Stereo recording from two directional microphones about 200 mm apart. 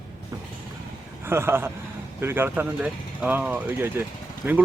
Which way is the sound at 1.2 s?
10° right (ahead or behind).